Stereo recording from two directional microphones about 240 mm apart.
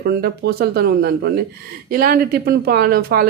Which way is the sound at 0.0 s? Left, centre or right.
Right.